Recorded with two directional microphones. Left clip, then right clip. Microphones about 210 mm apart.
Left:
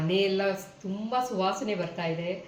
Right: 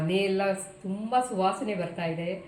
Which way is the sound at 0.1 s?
Centre (ahead or behind).